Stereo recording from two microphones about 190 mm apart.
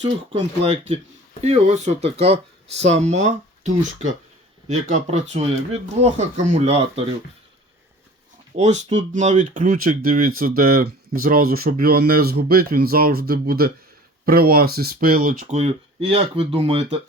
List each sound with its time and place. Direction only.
0.0 s speech: 25° right (ahead or behind)
8.5 s speech: 35° right (ahead or behind)